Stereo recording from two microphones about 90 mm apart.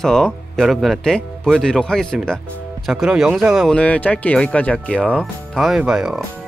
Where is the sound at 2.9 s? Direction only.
5° right (ahead or behind).